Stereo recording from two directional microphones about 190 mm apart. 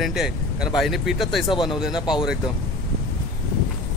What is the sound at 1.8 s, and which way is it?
Speech, 5° right (ahead or behind).